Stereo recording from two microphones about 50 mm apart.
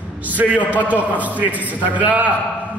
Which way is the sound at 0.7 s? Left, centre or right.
Right.